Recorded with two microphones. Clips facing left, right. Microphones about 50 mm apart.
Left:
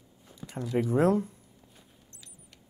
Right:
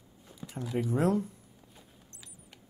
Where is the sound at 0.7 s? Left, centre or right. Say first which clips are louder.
Left 4 dB; left.